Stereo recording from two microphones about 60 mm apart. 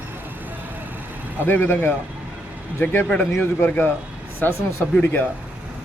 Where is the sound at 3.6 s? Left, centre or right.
Left.